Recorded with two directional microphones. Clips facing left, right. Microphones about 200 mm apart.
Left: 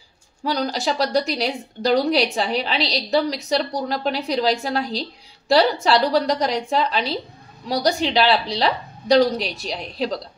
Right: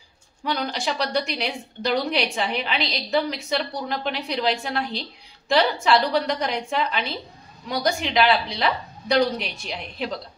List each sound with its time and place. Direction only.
0.4 s a woman's voice: 35° left (ahead or behind)